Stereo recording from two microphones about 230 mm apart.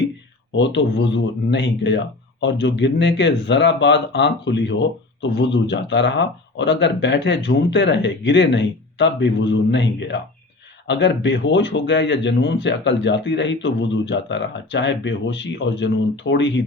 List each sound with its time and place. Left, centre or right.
0.5 s speech: left